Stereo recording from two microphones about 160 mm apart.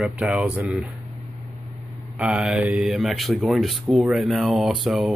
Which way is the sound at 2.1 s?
5° right (ahead or behind).